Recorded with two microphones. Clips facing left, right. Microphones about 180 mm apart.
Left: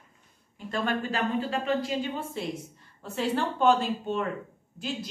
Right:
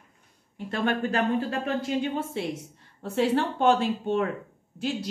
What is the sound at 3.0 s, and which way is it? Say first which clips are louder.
Speech: right 4 dB; 65° right (ahead or behind).